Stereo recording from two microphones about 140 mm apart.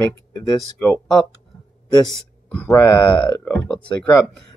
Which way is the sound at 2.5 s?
15° left (ahead or behind).